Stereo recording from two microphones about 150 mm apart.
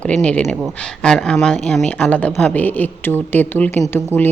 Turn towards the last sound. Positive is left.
turn(degrees=10)  # may be behind; listen again after turning